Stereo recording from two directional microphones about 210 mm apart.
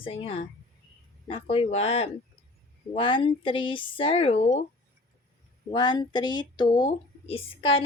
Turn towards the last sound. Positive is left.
turn(degrees=25)  # may be behind; listen again after turning